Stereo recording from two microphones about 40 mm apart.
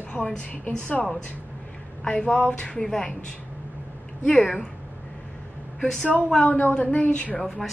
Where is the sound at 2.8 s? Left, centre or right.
Centre.